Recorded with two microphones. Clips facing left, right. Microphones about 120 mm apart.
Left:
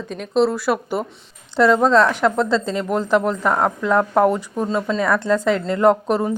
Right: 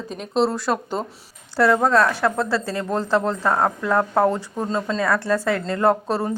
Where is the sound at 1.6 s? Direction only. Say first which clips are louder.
Left 3 dB; 20° left (ahead or behind).